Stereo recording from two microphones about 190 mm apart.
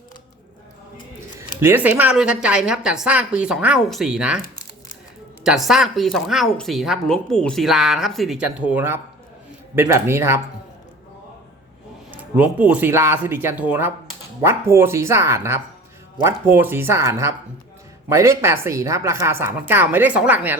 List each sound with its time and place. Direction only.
1.6 s speech: 10° right (ahead or behind)
5.4 s a woman's voice: centre (ahead or behind)
12.1 s a woman's voice: 5° right (ahead or behind)